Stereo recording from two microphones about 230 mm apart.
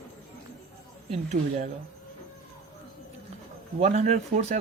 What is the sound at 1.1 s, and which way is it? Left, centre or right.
Speech, right.